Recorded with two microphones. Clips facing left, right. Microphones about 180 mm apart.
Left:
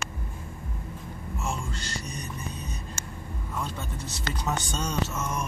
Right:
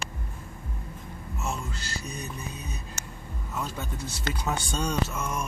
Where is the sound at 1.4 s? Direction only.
5° right (ahead or behind).